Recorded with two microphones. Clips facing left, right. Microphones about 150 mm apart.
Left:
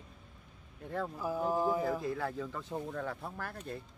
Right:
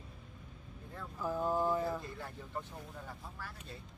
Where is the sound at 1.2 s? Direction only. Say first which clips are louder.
Even; 10° left (ahead or behind).